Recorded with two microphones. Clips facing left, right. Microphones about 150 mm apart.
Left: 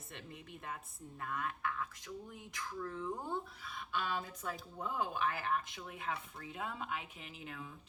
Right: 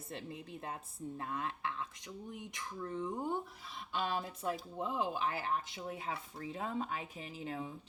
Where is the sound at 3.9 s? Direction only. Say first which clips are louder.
Right 2 dB; 30° right (ahead or behind).